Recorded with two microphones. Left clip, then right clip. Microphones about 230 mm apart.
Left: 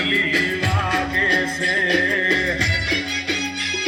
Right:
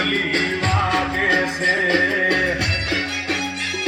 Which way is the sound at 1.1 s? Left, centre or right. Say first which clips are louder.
Even; centre.